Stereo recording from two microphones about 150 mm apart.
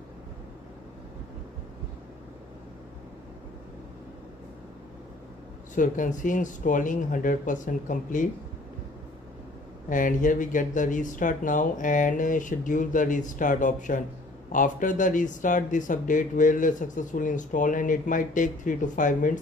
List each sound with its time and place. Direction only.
5.8 s speech: 60° left (ahead or behind)
9.8 s speech: 60° left (ahead or behind)